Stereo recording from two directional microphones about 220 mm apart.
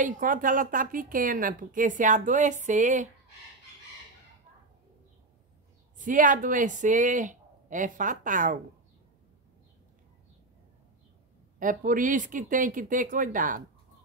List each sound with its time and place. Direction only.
0.0 s a woman's voice: 40° right (ahead or behind)
5.9 s a woman's voice: 35° right (ahead or behind)
11.6 s a woman's voice: 35° right (ahead or behind)